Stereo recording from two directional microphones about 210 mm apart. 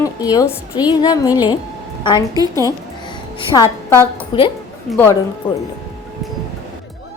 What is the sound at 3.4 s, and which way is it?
A woman's voice, 15° left (ahead or behind).